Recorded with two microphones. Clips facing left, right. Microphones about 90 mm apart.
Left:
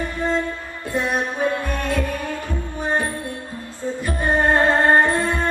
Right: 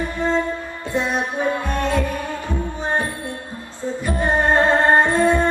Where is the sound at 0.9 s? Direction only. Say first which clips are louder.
Even; 20° right (ahead or behind).